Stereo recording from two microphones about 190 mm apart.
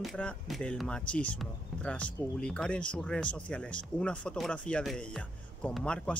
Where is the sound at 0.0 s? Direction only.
5° left (ahead or behind).